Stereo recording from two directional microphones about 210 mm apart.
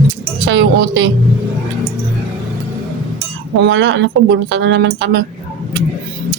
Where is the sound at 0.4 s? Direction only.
60° right (ahead or behind).